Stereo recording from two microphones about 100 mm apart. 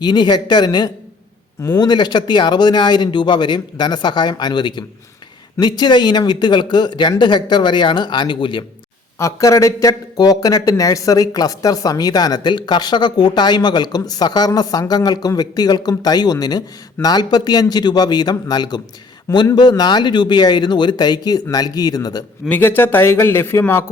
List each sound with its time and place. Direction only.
0.0 s speech: 45° left (ahead or behind)
9.1 s speech: 30° left (ahead or behind)
22.4 s a man's voice: 20° left (ahead or behind)